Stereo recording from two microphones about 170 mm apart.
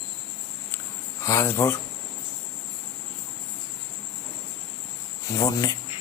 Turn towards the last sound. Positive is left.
turn(degrees=20)  # may be behind; listen again after turning